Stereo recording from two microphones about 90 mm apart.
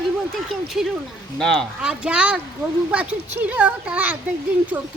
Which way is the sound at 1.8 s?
10° right (ahead or behind).